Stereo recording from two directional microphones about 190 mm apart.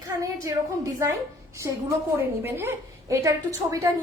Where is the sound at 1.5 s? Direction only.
15° right (ahead or behind).